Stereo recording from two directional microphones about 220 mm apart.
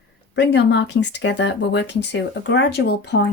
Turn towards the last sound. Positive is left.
turn(degrees=50)  # may be behind; listen again after turning